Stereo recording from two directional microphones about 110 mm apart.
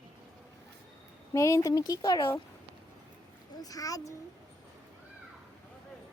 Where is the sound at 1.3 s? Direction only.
30° left (ahead or behind).